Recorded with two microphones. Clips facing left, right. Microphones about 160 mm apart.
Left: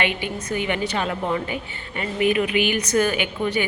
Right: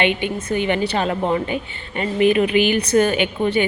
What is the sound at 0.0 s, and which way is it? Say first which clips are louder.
A woman's voice: right 5 dB; 25° right (ahead or behind).